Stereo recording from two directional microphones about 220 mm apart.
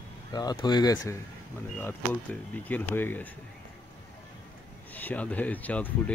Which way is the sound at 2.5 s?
10° left (ahead or behind).